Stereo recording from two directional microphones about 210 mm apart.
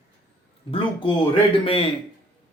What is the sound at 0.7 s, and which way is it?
Speech, 25° left (ahead or behind).